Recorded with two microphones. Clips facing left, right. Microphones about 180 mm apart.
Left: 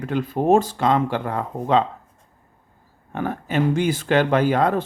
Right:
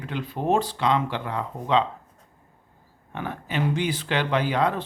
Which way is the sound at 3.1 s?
45° left (ahead or behind).